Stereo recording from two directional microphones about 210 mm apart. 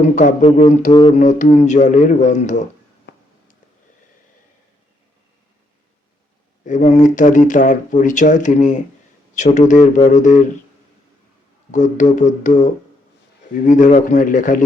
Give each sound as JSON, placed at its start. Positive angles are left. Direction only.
{"t": 0.2, "sound": "speech", "side_deg": 35}
{"t": 3.1, "sound": "a sound", "side_deg": 55}
{"t": 6.7, "sound": "speech", "side_deg": 35}
{"t": 11.7, "sound": "speech", "side_deg": 35}